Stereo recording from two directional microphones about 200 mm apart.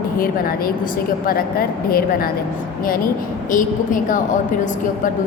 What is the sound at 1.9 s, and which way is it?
Speech, 45° left (ahead or behind).